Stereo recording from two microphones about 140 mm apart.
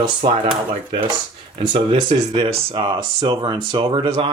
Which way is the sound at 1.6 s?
35° right (ahead or behind).